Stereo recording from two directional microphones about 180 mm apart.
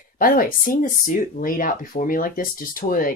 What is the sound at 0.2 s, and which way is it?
Speech, 50° left (ahead or behind).